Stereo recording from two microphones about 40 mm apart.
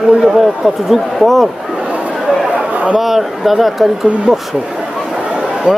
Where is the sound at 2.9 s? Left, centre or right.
Centre.